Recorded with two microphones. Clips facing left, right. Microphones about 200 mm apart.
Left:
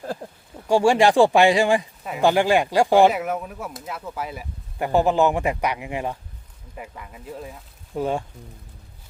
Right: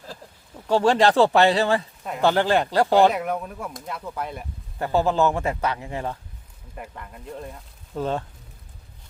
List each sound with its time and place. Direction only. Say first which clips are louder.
0.2 s a sound: left 8 dB; 55° left (ahead or behind)
0.7 s speech: left 2 dB; 10° left (ahead or behind)
4.8 s speech: left 2 dB; 15° left (ahead or behind)
6.7 s speech: even; 5° left (ahead or behind)